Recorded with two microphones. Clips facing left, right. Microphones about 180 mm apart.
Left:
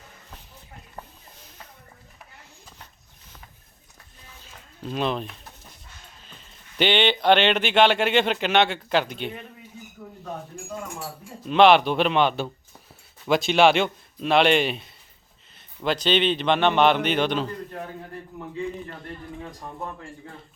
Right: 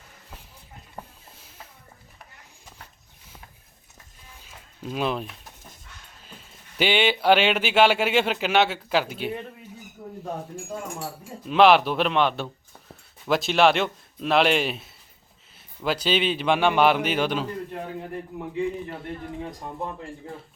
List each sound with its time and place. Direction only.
4.4 s music: 10° right (ahead or behind)
6.2 s speech: 5° right (ahead or behind)
11.4 s speech: centre (ahead or behind)